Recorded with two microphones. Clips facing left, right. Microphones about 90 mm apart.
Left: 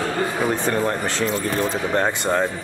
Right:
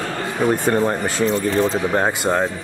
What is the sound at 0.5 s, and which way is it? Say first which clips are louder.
Speech: right 3 dB; 10° right (ahead or behind).